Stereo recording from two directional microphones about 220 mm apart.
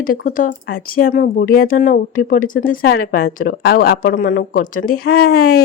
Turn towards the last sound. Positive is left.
turn(degrees=45)  # may be behind; listen again after turning